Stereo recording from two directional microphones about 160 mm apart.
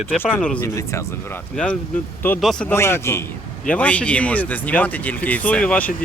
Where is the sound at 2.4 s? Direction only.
5° left (ahead or behind).